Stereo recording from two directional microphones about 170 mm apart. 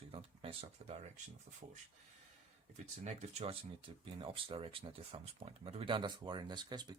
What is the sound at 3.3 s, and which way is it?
Speech, 35° right (ahead or behind).